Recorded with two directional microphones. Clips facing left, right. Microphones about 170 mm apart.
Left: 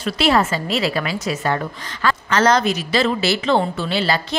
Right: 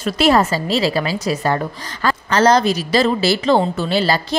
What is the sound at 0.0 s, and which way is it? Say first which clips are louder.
A woman's voice: right 3 dB; 40° right (ahead or behind).